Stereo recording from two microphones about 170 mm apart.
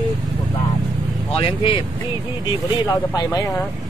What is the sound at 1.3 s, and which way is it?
Speech, 30° left (ahead or behind).